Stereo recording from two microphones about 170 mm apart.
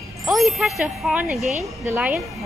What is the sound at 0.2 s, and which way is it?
Speech, centre (ahead or behind).